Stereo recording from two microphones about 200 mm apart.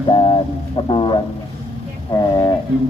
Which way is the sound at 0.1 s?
25° left (ahead or behind).